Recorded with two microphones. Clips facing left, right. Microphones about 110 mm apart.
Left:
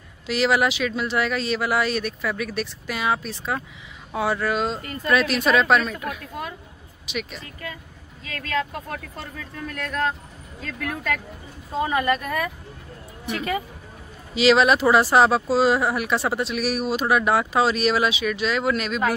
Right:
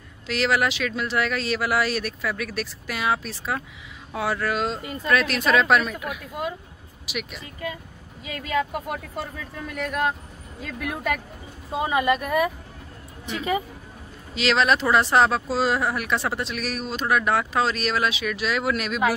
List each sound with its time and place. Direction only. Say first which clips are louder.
0.3 s speech: left 2 dB; 5° left (ahead or behind)
7.6 s speech: right 4 dB; 15° right (ahead or behind)
14.3 s speech: left 4 dB; 5° left (ahead or behind)